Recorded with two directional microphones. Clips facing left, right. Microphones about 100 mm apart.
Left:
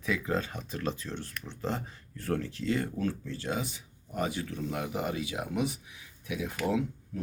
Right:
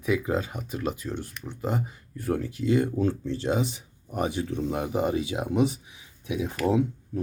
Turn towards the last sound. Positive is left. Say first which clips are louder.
# right 6 dB
turn(degrees=-25)  # may be behind; listen again after turning